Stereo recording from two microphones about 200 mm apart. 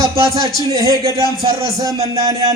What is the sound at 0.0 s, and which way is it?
Speech, 15° right (ahead or behind).